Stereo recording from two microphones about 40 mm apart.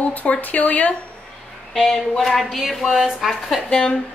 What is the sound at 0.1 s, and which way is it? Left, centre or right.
Speech, left.